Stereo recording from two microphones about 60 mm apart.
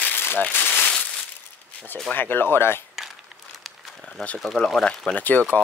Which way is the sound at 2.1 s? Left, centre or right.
Left.